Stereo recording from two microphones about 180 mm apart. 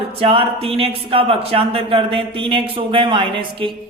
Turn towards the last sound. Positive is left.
turn(degrees=-25)  # may be behind; listen again after turning